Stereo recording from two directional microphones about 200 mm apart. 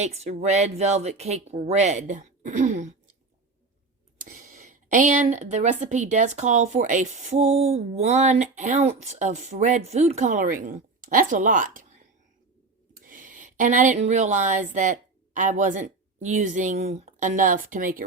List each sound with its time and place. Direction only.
0.0 s a woman's voice: 30° right (ahead or behind)
4.2 s a woman's voice: 35° right (ahead or behind)
13.1 s speech: 40° right (ahead or behind)